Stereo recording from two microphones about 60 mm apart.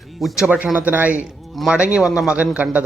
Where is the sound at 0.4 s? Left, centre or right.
Centre.